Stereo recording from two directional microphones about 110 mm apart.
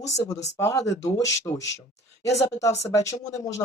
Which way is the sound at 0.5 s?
30° left (ahead or behind).